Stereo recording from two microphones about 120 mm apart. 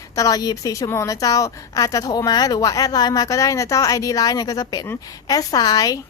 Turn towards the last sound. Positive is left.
turn(degrees=30)  # may be behind; listen again after turning